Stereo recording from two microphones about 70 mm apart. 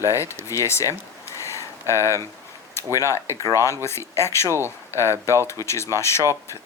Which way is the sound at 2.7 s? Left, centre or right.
Left.